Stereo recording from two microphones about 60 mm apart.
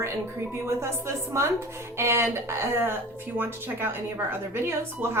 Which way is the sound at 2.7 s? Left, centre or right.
Right.